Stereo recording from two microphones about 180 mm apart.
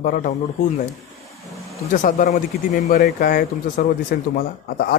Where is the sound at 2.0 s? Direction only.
45° left (ahead or behind).